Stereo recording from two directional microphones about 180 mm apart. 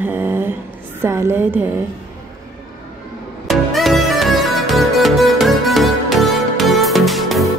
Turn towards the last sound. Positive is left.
turn(degrees=0)  # may be behind; listen again after turning